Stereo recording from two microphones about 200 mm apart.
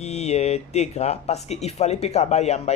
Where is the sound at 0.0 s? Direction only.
35° left (ahead or behind).